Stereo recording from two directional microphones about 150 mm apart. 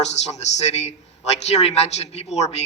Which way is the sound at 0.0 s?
45° left (ahead or behind).